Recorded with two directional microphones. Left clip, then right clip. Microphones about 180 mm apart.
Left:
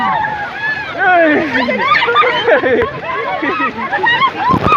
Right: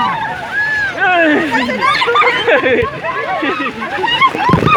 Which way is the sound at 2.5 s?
Centre (ahead or behind).